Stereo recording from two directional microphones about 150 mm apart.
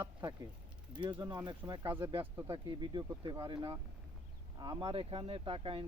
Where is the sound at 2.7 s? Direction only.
30° right (ahead or behind).